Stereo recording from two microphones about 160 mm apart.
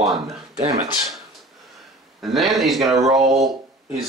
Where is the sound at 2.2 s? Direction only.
Centre (ahead or behind).